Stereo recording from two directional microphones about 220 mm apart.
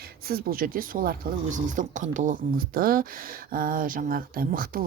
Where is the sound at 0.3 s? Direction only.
40° right (ahead or behind).